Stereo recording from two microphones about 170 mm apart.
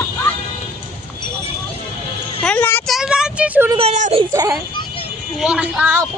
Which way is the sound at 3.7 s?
40° right (ahead or behind).